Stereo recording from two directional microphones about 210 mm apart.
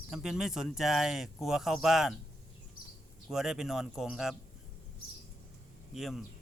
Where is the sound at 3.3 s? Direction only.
Centre (ahead or behind).